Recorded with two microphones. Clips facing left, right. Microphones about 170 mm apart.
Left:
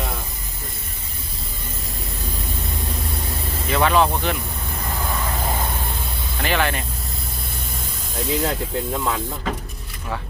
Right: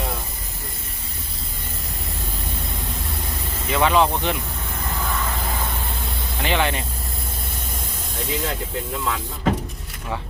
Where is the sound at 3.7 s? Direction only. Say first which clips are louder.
Even; 15° right (ahead or behind).